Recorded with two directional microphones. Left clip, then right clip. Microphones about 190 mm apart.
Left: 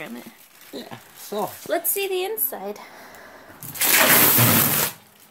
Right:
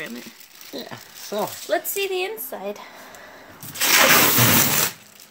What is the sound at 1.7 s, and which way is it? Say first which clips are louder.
Speech: right 1 dB; 5° left (ahead or behind).